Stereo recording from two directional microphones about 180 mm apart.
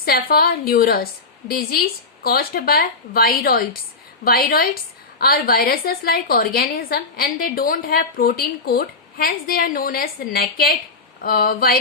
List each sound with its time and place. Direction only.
0.0 s a woman's voice: 55° left (ahead or behind)